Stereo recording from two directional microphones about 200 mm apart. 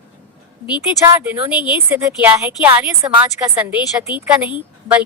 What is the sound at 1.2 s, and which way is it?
A woman's voice, 5° right (ahead or behind).